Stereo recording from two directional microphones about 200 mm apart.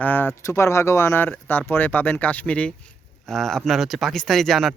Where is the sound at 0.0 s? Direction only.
10° left (ahead or behind).